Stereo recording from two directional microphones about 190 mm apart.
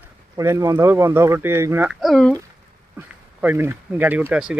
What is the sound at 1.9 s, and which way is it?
Speech, centre (ahead or behind).